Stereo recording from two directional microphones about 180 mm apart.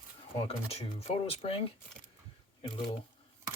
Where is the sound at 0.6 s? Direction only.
35° left (ahead or behind).